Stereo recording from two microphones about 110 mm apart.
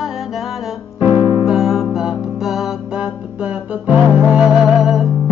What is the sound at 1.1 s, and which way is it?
Music, 50° left (ahead or behind).